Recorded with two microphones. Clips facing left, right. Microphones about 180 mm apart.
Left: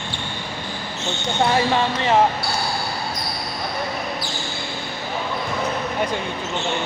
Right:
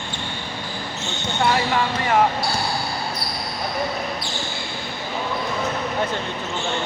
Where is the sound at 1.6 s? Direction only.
25° left (ahead or behind).